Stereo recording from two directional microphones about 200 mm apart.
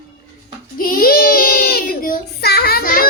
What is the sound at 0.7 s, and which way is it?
Child singing, 45° left (ahead or behind).